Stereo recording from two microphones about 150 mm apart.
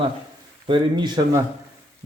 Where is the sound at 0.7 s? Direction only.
30° right (ahead or behind).